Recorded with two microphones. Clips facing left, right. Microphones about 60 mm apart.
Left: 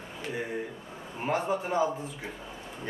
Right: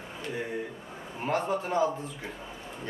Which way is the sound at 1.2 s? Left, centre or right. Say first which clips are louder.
Even; centre.